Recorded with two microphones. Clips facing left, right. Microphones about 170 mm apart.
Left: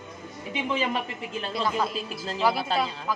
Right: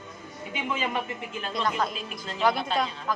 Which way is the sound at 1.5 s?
5° left (ahead or behind).